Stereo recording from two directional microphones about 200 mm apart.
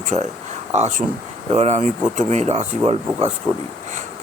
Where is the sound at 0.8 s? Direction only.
35° right (ahead or behind).